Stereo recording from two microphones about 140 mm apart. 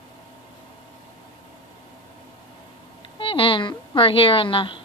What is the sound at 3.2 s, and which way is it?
A woman's voice, 40° left (ahead or behind).